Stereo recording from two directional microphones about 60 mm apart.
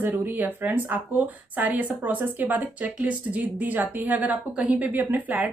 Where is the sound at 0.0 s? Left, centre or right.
Right.